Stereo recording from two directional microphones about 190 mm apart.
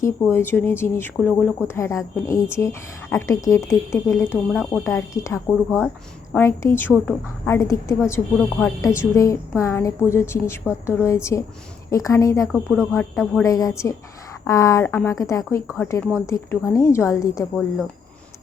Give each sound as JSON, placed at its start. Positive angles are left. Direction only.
{"t": 0.0, "sound": "speech", "side_deg": 15}
{"t": 5.5, "sound": "speech", "side_deg": 5}